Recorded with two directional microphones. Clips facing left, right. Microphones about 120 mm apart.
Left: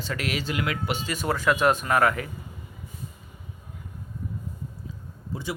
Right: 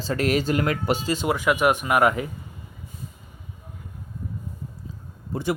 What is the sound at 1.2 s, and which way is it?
A man's voice, 15° right (ahead or behind).